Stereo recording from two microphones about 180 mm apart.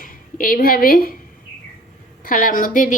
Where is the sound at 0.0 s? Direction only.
50° left (ahead or behind).